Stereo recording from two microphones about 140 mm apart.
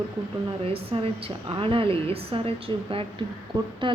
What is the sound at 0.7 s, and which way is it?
A woman's voice, 40° right (ahead or behind).